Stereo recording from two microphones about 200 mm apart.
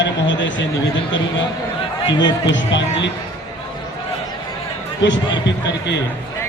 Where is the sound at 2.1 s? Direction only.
20° left (ahead or behind).